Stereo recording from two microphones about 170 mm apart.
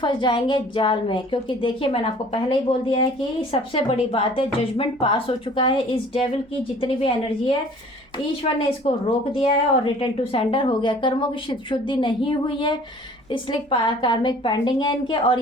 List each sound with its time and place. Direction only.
0.0 s a woman's voice: 30° left (ahead or behind)
8.8 s a woman's voice: 35° left (ahead or behind)